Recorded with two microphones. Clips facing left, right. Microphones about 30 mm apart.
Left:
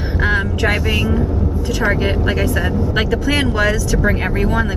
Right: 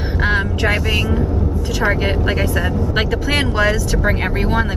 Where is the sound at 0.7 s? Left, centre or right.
Centre.